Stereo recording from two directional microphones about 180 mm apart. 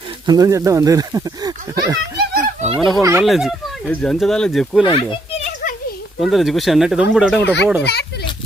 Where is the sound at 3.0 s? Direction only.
15° right (ahead or behind).